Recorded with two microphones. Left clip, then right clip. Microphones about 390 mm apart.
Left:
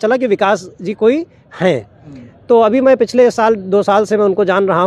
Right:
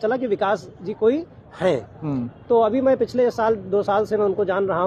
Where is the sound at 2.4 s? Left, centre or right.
Left.